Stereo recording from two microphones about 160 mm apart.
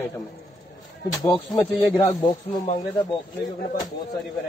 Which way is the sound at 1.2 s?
25° left (ahead or behind).